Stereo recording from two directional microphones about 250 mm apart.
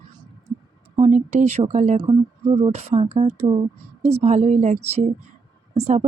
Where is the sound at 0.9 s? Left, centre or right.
Right.